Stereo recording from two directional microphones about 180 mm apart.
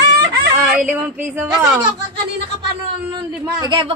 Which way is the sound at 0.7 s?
10° right (ahead or behind).